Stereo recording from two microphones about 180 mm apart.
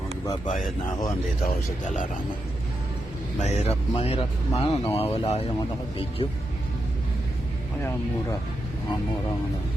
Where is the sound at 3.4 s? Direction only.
40° left (ahead or behind).